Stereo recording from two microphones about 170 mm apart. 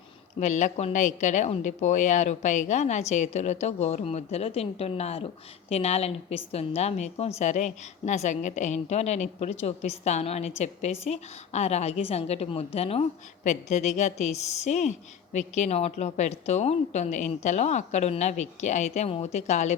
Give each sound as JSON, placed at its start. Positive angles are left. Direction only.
{"t": 0.3, "sound": "a woman's voice", "side_deg": 45}